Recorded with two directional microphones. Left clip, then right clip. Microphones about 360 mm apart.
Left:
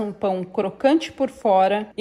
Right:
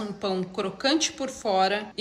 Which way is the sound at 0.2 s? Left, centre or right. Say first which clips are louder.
Left 5 dB; centre.